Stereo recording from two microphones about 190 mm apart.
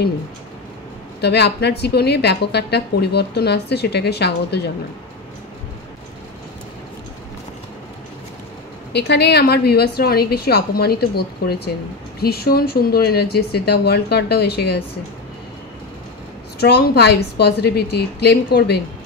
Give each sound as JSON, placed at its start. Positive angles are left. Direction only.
{"t": 1.2, "sound": "a woman's voice", "side_deg": 60}
{"t": 8.9, "sound": "a woman's voice", "side_deg": 60}
{"t": 16.5, "sound": "a woman's voice", "side_deg": 55}